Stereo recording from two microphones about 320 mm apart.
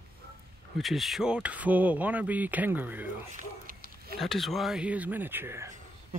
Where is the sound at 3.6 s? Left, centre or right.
Right.